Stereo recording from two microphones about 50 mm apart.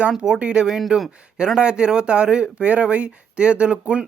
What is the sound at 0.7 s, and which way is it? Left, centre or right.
Speech, centre.